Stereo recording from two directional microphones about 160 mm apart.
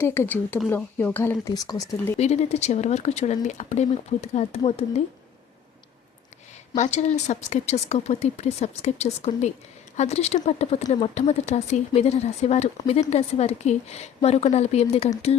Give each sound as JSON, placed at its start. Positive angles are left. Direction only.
{"t": 0.0, "sound": "speech", "side_deg": 15}
{"t": 2.1, "sound": "speech", "side_deg": 45}
{"t": 6.7, "sound": "a woman's voice", "side_deg": 45}